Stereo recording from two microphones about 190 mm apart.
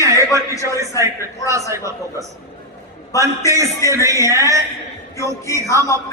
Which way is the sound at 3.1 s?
15° left (ahead or behind).